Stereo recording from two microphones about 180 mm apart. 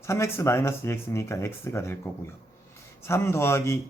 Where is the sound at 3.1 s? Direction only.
15° left (ahead or behind).